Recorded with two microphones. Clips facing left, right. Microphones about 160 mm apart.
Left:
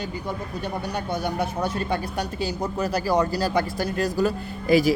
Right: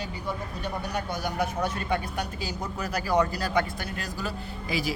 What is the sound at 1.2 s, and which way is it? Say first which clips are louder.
A man's voice: left 1 dB; 30° left (ahead or behind).